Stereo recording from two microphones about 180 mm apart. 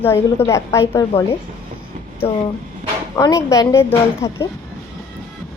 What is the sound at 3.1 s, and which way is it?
A woman's voice, 15° left (ahead or behind).